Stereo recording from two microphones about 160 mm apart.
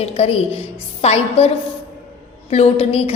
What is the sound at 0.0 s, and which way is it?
A woman's voice, 40° left (ahead or behind).